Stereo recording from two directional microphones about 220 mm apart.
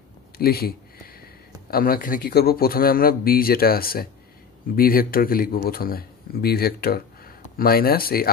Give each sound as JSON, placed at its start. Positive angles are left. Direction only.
{"t": 0.4, "sound": "speech", "side_deg": 45}